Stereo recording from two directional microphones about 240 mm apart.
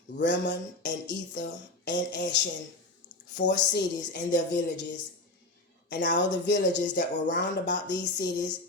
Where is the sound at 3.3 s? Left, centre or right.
Left.